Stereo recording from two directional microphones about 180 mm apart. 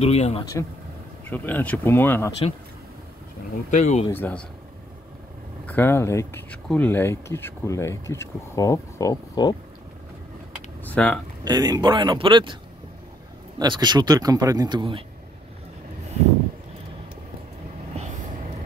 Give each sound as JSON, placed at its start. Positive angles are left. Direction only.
{"t": 0.0, "sound": "speech", "side_deg": 35}
{"t": 1.2, "sound": "speech", "side_deg": 10}
{"t": 3.7, "sound": "speech", "side_deg": 40}
{"t": 4.1, "sound": "speech", "side_deg": 10}
{"t": 5.7, "sound": "speech", "side_deg": 10}
{"t": 10.8, "sound": "computer keyboard", "side_deg": 10}
{"t": 11.4, "sound": "speech", "side_deg": -20}
{"t": 13.6, "sound": "speech", "side_deg": -25}